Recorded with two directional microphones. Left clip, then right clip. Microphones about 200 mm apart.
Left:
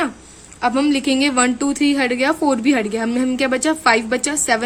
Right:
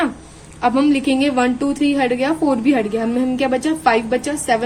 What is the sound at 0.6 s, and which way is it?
A woman's voice, 25° left (ahead or behind).